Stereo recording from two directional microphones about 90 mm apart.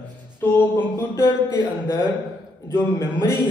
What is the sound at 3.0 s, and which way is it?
Speech, 30° left (ahead or behind).